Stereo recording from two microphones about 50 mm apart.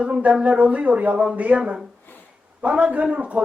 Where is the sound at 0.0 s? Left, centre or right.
Right.